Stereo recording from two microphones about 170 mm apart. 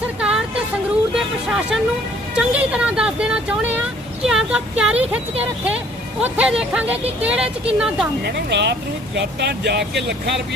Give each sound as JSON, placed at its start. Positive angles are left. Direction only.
{"t": 0.2, "sound": "a sound", "side_deg": -5}
{"t": 1.1, "sound": "speech", "side_deg": -5}
{"t": 8.2, "sound": "speech", "side_deg": -80}
{"t": 9.1, "sound": "speech", "side_deg": -75}